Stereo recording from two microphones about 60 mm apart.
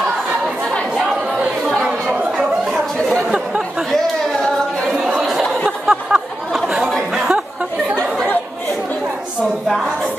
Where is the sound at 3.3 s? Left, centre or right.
Centre.